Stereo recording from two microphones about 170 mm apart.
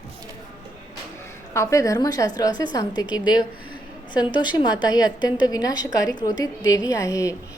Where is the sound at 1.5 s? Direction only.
15° left (ahead or behind).